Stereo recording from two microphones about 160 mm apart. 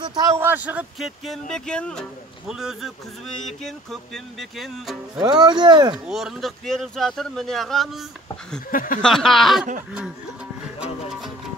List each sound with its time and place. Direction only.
0.0 s a sound: 25° right (ahead or behind)
0.4 s speech: 10° right (ahead or behind)
5.2 s speech: 25° right (ahead or behind)
6.0 s speech: 5° right (ahead or behind)
8.6 s speech: 60° left (ahead or behind)
9.0 s speech: centre (ahead or behind)
10.8 s music: centre (ahead or behind)